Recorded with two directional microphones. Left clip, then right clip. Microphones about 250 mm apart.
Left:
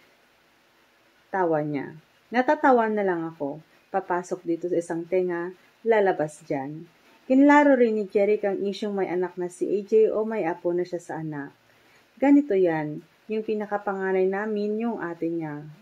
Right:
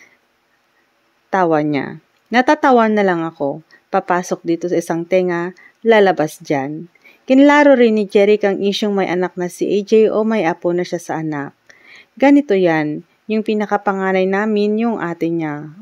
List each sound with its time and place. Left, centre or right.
1.3 s speech: right